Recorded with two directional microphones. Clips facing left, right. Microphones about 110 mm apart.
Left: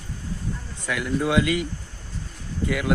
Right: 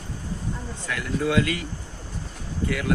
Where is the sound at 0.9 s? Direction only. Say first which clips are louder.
Left 1 dB; 20° left (ahead or behind).